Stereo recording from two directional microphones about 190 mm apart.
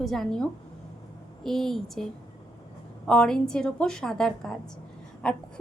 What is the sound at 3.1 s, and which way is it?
A woman's voice, 5° left (ahead or behind).